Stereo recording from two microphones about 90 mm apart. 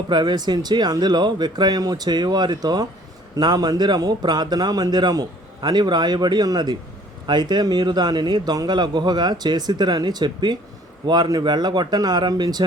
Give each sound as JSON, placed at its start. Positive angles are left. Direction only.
{"t": 0.1, "sound": "a man's voice", "side_deg": -55}